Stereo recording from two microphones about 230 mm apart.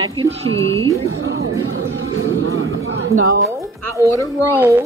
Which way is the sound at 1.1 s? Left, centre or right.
Right.